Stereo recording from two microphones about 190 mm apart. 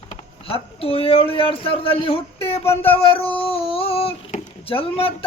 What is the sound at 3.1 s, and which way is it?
Speech, 30° left (ahead or behind).